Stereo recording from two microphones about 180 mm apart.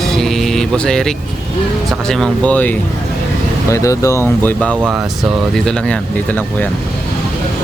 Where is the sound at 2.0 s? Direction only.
5° left (ahead or behind).